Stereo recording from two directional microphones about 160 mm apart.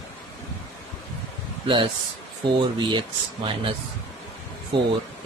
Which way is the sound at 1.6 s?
30° right (ahead or behind).